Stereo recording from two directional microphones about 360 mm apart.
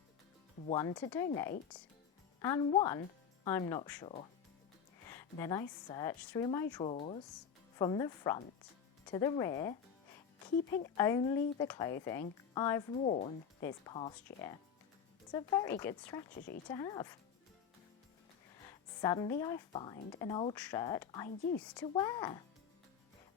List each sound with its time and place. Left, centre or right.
0.7 s speech: centre
5.0 s a sound: centre
5.9 s speech: centre
10.9 s speech: centre
13.1 s speech: centre
19.0 s speech: centre